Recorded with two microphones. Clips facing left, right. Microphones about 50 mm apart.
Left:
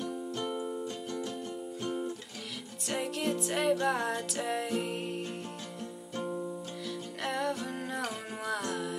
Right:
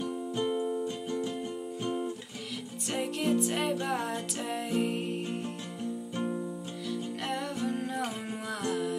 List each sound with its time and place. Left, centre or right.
0.0 s music: centre
6.1 s music: centre
6.9 s music: centre